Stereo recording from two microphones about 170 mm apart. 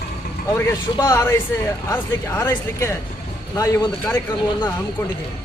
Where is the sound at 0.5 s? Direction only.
15° left (ahead or behind).